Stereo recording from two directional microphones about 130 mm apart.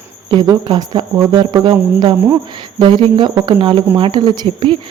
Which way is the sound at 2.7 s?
40° right (ahead or behind).